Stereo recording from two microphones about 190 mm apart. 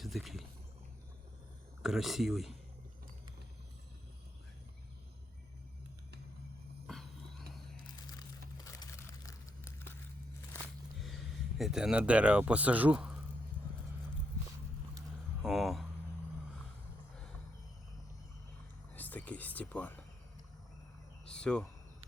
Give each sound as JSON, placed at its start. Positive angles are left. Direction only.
{"t": 0.0, "sound": "speech", "side_deg": 0}
{"t": 1.8, "sound": "speech", "side_deg": 0}
{"t": 6.8, "sound": "vehicle", "side_deg": 0}
{"t": 8.6, "sound": "crumpling", "side_deg": 15}
{"t": 11.0, "sound": "speech", "side_deg": 0}
{"t": 15.4, "sound": "a sound", "side_deg": 0}
{"t": 18.9, "sound": "a sound", "side_deg": 10}
{"t": 21.3, "sound": "speech", "side_deg": 5}